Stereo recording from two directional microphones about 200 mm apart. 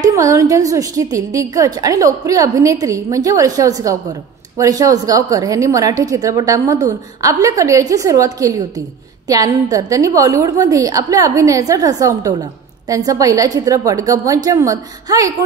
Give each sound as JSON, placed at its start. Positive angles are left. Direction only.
{"t": 0.0, "sound": "a woman's voice", "side_deg": -15}